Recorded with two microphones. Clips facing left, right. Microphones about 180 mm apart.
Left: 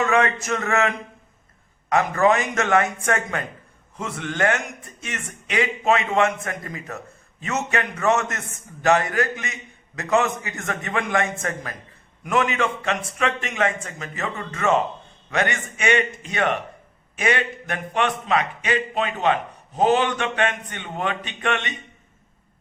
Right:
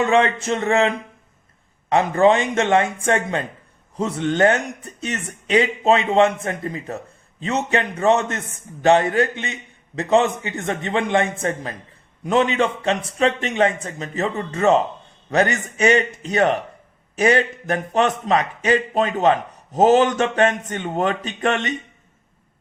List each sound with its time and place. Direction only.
0.0 s a man's voice: 30° right (ahead or behind)